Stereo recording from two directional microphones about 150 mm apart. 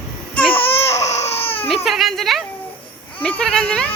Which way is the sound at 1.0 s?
45° left (ahead or behind).